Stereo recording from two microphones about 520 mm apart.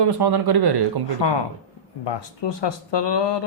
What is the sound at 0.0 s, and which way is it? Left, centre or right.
Speech, right.